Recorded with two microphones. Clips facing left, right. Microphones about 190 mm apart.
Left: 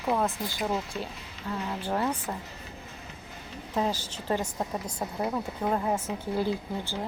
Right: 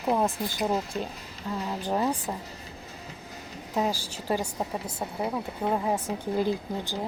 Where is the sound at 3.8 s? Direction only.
10° right (ahead or behind).